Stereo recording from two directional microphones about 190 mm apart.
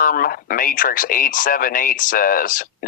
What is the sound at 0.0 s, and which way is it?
Speech, 50° left (ahead or behind).